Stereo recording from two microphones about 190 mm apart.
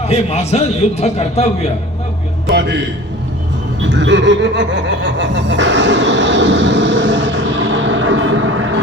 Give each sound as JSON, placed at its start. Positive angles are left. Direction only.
{"t": 0.1, "sound": "a man's voice", "side_deg": 35}
{"t": 2.5, "sound": "a man's voice", "side_deg": -60}
{"t": 3.8, "sound": "chuckle", "side_deg": -70}